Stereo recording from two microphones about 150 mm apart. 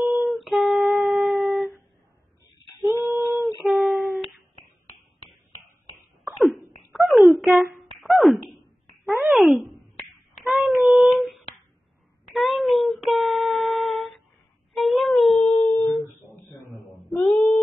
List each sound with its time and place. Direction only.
0.1 s humming: centre (ahead or behind)
2.9 s female singing: 20° right (ahead or behind)
3.6 s humming: centre (ahead or behind)
6.2 s cough: centre (ahead or behind)
6.9 s a sound: centre (ahead or behind)
10.4 s child singing: centre (ahead or behind)
14.7 s a sound: centre (ahead or behind)
15.5 s humming: 20° left (ahead or behind)
17.1 s a sound: centre (ahead or behind)